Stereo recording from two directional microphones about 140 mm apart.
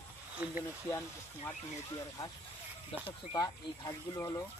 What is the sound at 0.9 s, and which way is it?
Speech, 15° left (ahead or behind).